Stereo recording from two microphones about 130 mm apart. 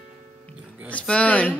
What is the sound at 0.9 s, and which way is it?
Speech, 10° left (ahead or behind).